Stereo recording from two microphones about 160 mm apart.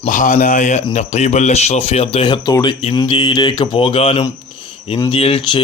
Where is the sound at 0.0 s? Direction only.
50° left (ahead or behind).